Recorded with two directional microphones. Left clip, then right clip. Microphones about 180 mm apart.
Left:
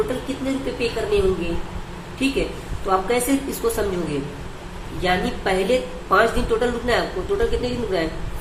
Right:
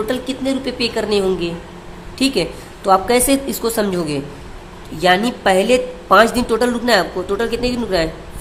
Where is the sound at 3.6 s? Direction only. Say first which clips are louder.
Even; 40° right (ahead or behind).